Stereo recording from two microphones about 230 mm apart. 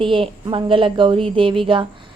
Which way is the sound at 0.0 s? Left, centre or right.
Right.